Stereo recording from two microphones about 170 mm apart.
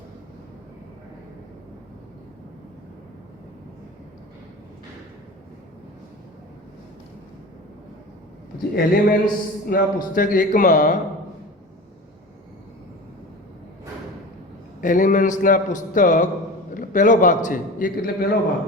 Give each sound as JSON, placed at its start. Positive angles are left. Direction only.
{"t": 8.7, "sound": "a man's voice", "side_deg": 60}
{"t": 14.8, "sound": "a man's voice", "side_deg": 50}